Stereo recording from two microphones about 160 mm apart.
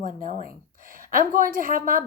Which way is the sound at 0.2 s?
55° right (ahead or behind).